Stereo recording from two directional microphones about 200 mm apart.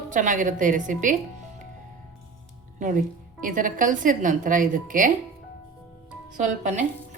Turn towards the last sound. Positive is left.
turn(degrees=-40)  # may be behind; listen again after turning